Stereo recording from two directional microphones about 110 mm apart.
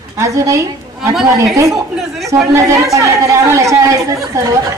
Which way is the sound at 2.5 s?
30° right (ahead or behind).